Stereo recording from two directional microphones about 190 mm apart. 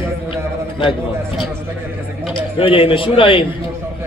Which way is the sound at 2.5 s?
30° left (ahead or behind).